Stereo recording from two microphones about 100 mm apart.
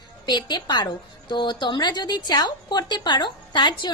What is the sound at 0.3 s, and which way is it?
A woman's voice, 45° left (ahead or behind).